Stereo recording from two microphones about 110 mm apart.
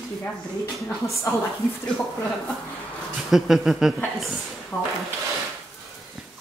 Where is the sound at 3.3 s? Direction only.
5° right (ahead or behind).